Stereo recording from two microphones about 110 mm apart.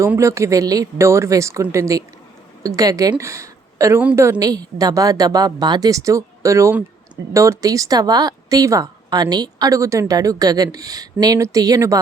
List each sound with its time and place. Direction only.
0.2 s a woman's voice: 25° right (ahead or behind)